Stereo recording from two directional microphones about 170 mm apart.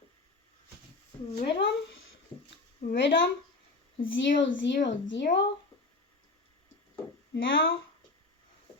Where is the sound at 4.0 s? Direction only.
60° left (ahead or behind); by 5.2 s 75° left (ahead or behind).